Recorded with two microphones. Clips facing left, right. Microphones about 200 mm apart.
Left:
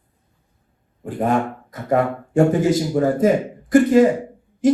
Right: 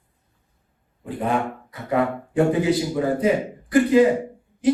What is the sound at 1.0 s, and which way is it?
Speech, 45° left (ahead or behind).